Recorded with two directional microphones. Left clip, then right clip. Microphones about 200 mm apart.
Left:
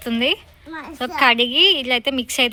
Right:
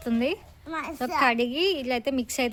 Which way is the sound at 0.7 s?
20° left (ahead or behind).